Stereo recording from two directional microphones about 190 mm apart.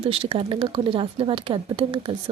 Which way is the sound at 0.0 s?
30° right (ahead or behind).